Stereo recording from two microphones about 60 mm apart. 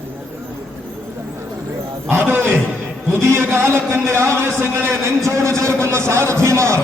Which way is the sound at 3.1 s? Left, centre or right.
Right.